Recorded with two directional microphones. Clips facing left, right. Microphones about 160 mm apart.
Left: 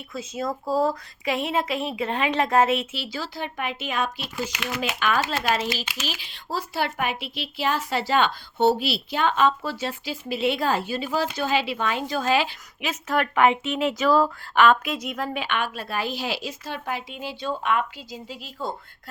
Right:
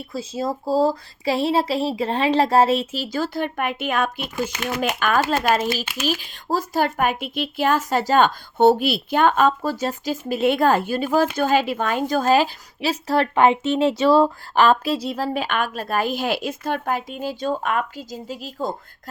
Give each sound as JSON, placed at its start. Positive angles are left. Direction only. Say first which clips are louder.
{"t": 0.1, "sound": "speech", "louder": "right 3 dB", "side_deg": -30}